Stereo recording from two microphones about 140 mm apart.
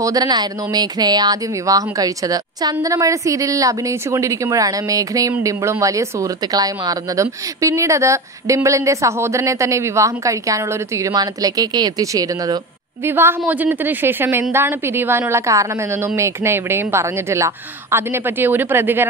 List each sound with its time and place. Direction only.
0.0 s a woman's voice: 25° right (ahead or behind)